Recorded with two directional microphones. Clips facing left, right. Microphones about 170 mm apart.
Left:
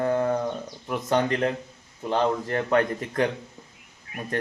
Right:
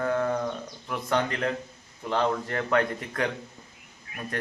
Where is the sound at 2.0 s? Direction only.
20° left (ahead or behind).